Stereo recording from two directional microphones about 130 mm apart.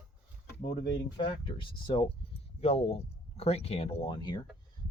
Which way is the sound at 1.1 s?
40° left (ahead or behind).